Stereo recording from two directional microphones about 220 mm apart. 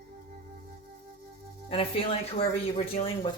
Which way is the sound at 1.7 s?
25° left (ahead or behind).